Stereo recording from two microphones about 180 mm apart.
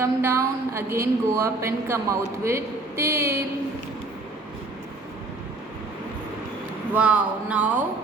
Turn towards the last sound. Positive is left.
turn(degrees=-10)  # may be behind; listen again after turning